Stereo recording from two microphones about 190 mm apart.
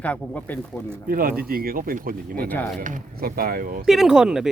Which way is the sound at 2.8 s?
45° right (ahead or behind).